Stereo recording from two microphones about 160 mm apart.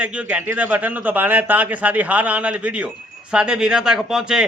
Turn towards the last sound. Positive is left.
turn(degrees=-5)  # may be behind; listen again after turning